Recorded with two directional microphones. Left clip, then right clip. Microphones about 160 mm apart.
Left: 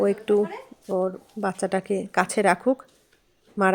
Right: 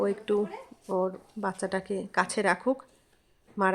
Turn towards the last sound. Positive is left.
turn(degrees=20)  # may be behind; listen again after turning